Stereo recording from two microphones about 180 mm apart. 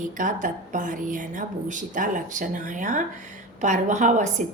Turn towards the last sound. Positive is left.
turn(degrees=-45)  # may be behind; listen again after turning